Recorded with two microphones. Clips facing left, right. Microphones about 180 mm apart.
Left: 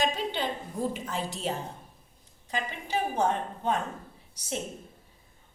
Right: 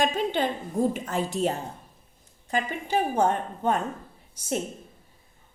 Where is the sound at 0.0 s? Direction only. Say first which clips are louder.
Right 4 dB; 50° right (ahead or behind).